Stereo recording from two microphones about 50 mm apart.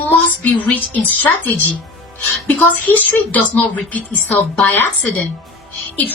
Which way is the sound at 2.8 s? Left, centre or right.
Left.